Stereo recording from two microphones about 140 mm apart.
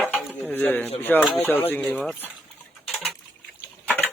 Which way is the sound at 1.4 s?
15° left (ahead or behind).